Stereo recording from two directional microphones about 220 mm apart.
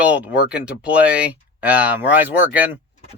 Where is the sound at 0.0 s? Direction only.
5° right (ahead or behind).